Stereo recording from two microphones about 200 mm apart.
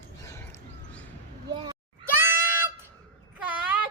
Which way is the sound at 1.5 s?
25° right (ahead or behind).